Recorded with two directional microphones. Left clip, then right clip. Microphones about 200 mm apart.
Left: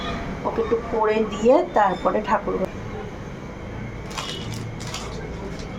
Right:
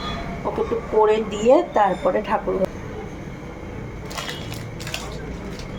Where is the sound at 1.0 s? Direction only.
Centre (ahead or behind).